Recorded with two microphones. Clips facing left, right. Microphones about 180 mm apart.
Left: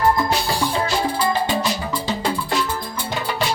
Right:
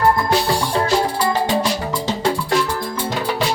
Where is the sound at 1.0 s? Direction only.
75° right (ahead or behind).